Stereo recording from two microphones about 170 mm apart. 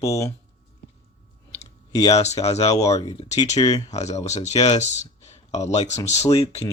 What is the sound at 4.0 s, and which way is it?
Speech, 40° left (ahead or behind).